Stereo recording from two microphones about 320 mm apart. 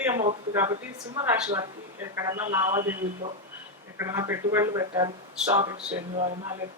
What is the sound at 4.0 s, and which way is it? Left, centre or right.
A woman's voice, centre.